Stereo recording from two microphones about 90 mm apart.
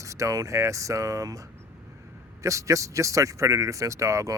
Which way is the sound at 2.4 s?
35° right (ahead or behind).